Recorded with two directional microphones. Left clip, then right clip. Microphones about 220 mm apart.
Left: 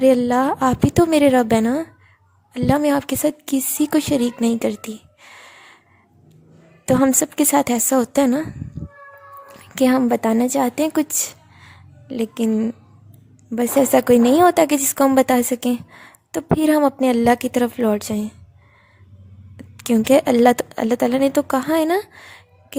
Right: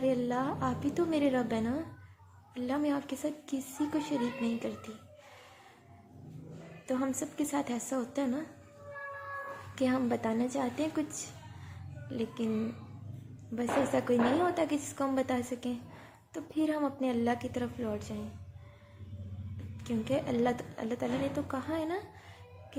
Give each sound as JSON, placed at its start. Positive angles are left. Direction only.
{"t": 0.0, "sound": "a woman's voice", "side_deg": 50}
{"t": 6.8, "sound": "a woman's voice", "side_deg": 55}
{"t": 9.7, "sound": "a woman's voice", "side_deg": 50}
{"t": 11.6, "sound": "music", "side_deg": 50}
{"t": 13.6, "sound": "a woman's voice", "side_deg": 50}
{"t": 19.7, "sound": "a woman's voice", "side_deg": 50}